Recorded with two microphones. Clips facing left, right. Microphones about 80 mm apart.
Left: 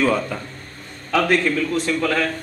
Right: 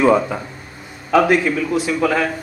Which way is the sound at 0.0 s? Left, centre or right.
Centre.